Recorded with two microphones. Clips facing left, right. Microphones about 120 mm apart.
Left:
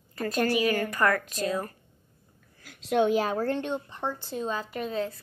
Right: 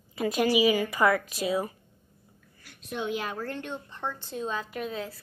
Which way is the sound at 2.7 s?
90° left.